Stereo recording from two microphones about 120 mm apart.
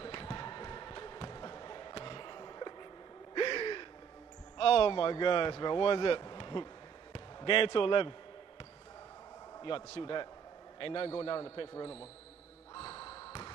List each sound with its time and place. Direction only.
0.0 s basketball bounce: 45° left (ahead or behind)
3.3 s gasp: 45° left (ahead or behind)
4.6 s speech: 50° left (ahead or behind)
9.6 s a man's voice: 45° left (ahead or behind)
12.7 s basketball bounce: 50° left (ahead or behind)